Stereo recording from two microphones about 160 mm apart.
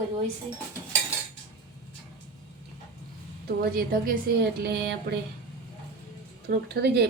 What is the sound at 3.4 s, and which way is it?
Speech, 70° right (ahead or behind).